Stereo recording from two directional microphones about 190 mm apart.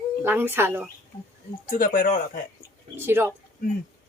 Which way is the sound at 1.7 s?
45° left (ahead or behind).